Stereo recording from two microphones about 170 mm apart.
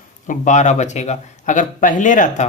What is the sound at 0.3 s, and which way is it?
Speech, 45° left (ahead or behind).